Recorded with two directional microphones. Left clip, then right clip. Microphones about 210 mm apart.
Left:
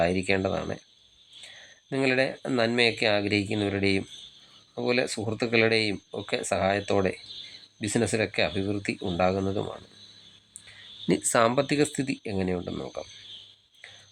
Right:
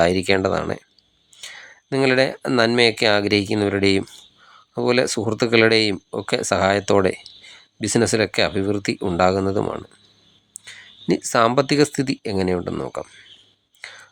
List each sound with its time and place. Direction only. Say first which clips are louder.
0.0 s speech: right 7 dB; 25° right (ahead or behind)
11.0 s speech: right 5 dB; 15° right (ahead or behind)